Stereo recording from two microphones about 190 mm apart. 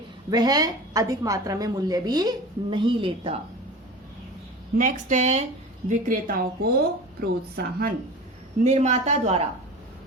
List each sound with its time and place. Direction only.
0.3 s a woman's voice: 20° right (ahead or behind)
4.8 s speech: 40° right (ahead or behind)
8.6 s speech: 35° right (ahead or behind)